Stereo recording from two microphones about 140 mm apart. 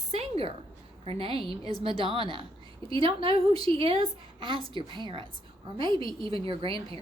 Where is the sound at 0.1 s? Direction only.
45° right (ahead or behind).